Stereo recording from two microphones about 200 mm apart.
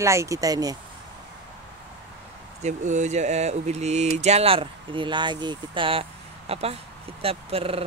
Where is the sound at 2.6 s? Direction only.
35° right (ahead or behind).